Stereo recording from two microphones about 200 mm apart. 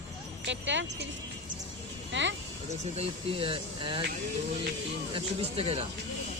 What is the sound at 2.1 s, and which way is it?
Speech, 65° right (ahead or behind).